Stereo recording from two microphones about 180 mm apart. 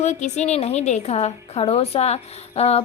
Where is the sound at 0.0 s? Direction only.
40° left (ahead or behind).